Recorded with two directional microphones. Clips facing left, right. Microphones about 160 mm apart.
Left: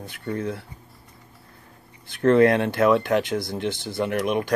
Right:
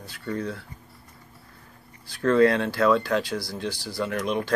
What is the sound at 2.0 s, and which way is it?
Speech, 20° left (ahead or behind).